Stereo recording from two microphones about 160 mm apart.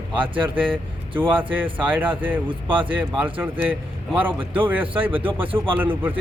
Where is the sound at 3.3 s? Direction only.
10° right (ahead or behind).